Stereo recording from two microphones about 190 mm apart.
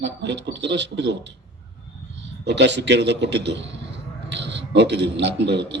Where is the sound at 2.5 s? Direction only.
65° right (ahead or behind).